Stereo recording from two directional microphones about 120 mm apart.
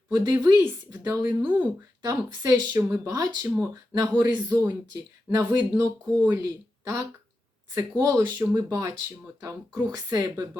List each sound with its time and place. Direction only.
0.1 s speech: 30° right (ahead or behind); by 1.6 s 15° right (ahead or behind)
2.0 s a woman's voice: 30° right (ahead or behind)
7.8 s speech: 25° right (ahead or behind)